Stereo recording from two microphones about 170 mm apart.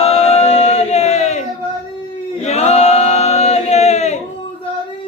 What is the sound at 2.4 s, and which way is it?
Choir, 40° left (ahead or behind).